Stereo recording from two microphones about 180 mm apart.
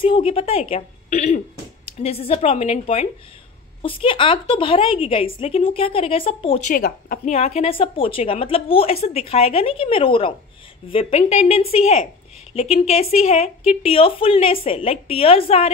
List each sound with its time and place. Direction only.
0.0 s a woman's voice: 30° left (ahead or behind)
6.6 s speech: 50° left (ahead or behind)
7.3 s a woman's voice: 40° left (ahead or behind)